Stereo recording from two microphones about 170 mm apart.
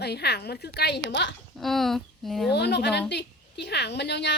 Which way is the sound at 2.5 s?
80° left.